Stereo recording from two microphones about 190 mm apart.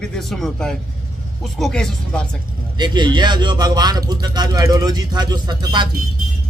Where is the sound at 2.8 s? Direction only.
25° right (ahead or behind).